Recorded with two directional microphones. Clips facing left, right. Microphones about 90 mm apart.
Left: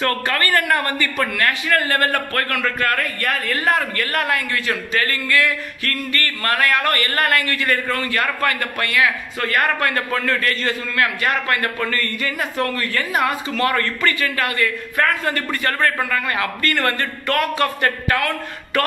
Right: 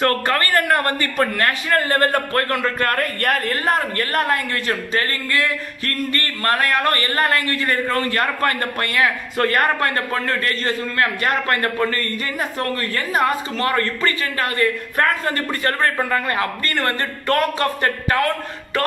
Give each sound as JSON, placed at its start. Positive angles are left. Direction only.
{"t": 0.0, "sound": "a man's voice", "side_deg": -35}
{"t": 3.6, "sound": "a man's voice", "side_deg": -35}